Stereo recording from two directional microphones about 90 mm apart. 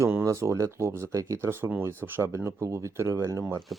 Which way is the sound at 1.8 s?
25° right (ahead or behind).